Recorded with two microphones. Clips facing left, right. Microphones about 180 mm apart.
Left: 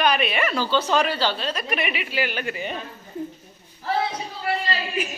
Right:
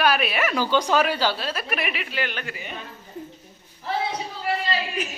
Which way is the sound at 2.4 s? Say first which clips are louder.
Left 7 dB; 30° left (ahead or behind).